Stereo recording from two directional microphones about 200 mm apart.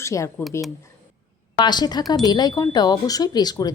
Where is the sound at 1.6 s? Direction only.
20° left (ahead or behind).